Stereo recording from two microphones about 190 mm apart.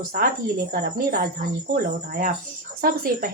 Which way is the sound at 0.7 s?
50° right (ahead or behind).